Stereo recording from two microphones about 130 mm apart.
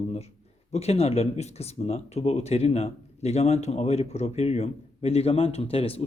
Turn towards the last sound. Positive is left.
turn(degrees=50)  # may be behind; listen again after turning